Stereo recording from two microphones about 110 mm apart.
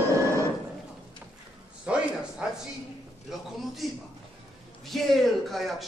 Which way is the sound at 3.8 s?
Centre (ahead or behind).